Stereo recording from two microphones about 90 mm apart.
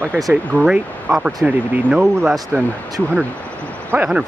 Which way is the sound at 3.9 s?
25° right (ahead or behind).